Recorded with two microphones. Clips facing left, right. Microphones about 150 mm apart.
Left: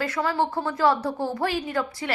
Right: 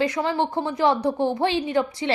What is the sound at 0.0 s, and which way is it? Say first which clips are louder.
A woman's voice: right 2 dB; 15° right (ahead or behind).